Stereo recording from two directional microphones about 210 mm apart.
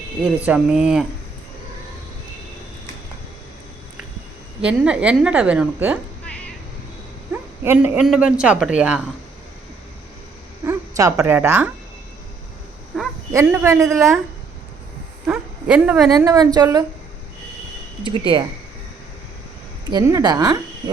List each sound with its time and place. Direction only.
0.4 s a woman's voice: 5° right (ahead or behind)
4.6 s a woman's voice: 5° right (ahead or behind)
7.6 s a woman's voice: 10° right (ahead or behind)
10.7 s a woman's voice: 15° right (ahead or behind)
12.9 s a sound: centre (ahead or behind)
13.3 s a woman's voice: 10° right (ahead or behind)
15.3 s speech: 5° right (ahead or behind)
16.1 s a woman's voice: 15° right (ahead or behind)
18.0 s speech: 20° right (ahead or behind)
19.9 s a woman's voice: 15° right (ahead or behind)